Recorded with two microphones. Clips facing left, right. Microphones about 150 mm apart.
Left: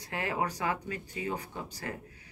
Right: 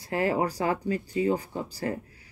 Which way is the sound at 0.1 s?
35° right (ahead or behind).